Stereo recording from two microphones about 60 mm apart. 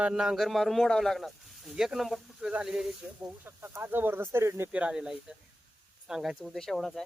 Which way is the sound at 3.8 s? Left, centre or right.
Right.